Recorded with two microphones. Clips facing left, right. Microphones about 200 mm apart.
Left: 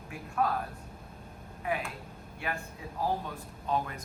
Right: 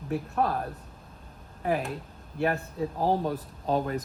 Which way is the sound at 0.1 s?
35° right (ahead or behind).